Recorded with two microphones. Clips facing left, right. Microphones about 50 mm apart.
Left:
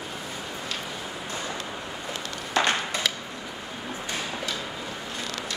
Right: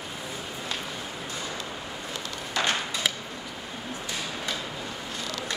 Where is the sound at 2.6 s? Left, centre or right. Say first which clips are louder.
Left 4 dB; left.